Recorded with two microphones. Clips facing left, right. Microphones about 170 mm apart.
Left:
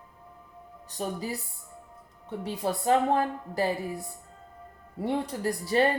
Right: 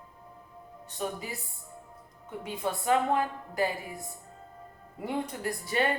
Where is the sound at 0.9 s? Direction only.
35° left (ahead or behind).